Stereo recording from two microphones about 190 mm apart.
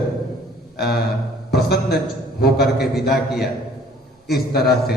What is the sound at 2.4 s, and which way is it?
Speech, 55° left (ahead or behind).